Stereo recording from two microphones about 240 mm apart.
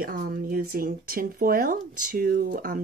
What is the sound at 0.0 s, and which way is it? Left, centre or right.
Speech, right.